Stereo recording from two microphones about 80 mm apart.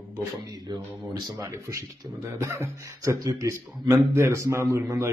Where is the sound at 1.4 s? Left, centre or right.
Right.